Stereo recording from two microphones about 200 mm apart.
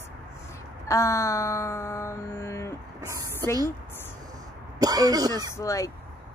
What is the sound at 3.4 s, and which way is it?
Speech, 20° right (ahead or behind).